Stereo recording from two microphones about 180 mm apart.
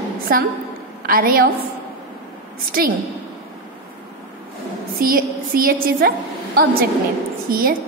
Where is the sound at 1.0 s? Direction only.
55° right (ahead or behind).